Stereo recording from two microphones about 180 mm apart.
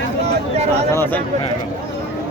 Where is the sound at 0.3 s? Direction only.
35° right (ahead or behind).